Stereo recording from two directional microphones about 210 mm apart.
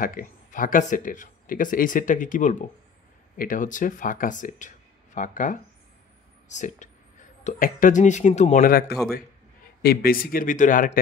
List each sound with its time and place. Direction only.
0.0 s a man's voice: 40° left (ahead or behind)